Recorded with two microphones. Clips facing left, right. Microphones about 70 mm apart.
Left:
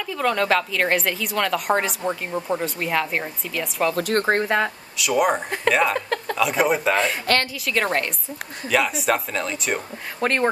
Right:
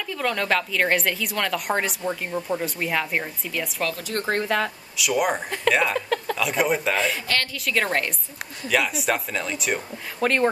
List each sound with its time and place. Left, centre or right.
0.1 s a woman's voice: centre
3.9 s speech: left
4.3 s speech: left
4.9 s a woman's voice: centre
10.2 s speech: centre